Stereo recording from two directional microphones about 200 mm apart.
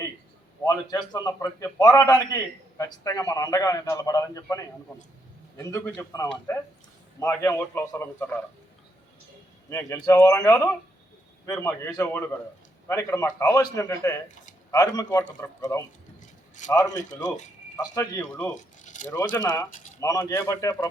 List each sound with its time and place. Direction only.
0.6 s a man's voice: 20° left (ahead or behind)
5.7 s a man's voice: 15° left (ahead or behind)
9.6 s a man's voice: 10° left (ahead or behind)
18.2 s a man's voice: 5° left (ahead or behind)
18.5 s speech: 40° left (ahead or behind)
19.1 s a man's voice: 20° left (ahead or behind)